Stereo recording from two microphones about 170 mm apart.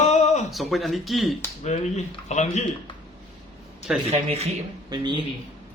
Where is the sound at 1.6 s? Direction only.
40° left (ahead or behind).